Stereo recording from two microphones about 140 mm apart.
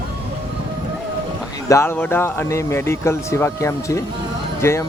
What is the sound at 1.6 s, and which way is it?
Speech, 20° left (ahead or behind).